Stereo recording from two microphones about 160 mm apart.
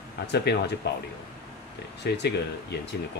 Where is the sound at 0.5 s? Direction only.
90° left.